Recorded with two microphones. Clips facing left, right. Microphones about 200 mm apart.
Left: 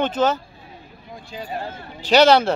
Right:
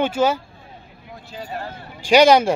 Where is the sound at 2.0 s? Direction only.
10° right (ahead or behind).